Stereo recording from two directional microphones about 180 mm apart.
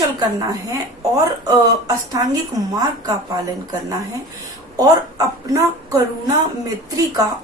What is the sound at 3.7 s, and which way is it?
A woman's voice, 20° right (ahead or behind).